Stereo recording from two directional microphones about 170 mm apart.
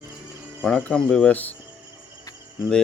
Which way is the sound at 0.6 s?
5° left (ahead or behind).